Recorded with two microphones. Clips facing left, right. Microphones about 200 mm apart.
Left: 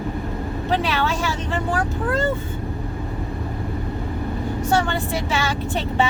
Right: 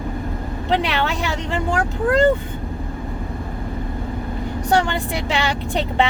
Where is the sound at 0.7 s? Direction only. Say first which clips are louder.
Right 2 dB; 15° right (ahead or behind).